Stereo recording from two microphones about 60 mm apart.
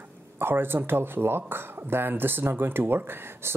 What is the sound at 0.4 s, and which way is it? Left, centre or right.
Speech, right.